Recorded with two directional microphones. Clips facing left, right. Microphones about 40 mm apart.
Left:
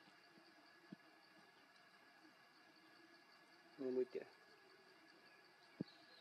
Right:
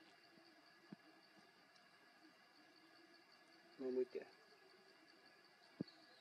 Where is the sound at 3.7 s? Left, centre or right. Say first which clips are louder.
Even; left.